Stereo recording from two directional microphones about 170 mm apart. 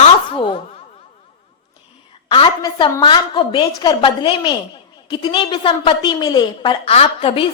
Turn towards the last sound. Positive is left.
turn(degrees=35)  # may be behind; listen again after turning